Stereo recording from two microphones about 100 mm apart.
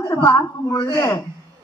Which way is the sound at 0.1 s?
35° left (ahead or behind).